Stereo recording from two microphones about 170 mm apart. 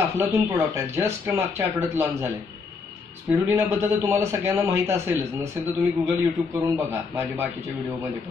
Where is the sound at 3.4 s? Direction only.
15° right (ahead or behind).